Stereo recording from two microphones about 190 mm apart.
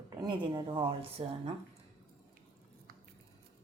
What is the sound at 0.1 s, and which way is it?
Speech, 20° right (ahead or behind).